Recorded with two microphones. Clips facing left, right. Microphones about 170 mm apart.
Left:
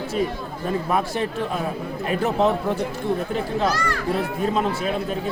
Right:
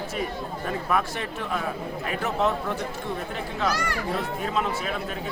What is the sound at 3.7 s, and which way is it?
Speech, 10° right (ahead or behind).